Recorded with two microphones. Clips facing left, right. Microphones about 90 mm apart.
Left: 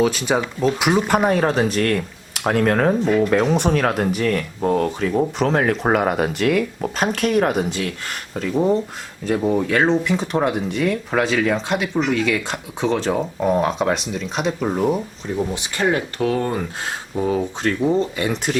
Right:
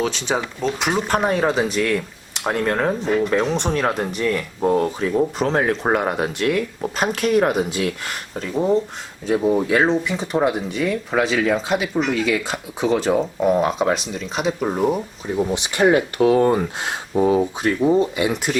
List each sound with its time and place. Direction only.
0.0 s speech: 5° left (ahead or behind)
15.4 s speech: 20° right (ahead or behind)